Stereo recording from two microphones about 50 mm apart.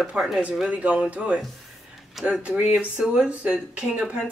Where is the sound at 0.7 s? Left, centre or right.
Right.